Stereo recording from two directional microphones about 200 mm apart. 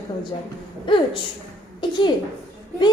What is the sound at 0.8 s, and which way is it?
A woman's voice, 25° left (ahead or behind).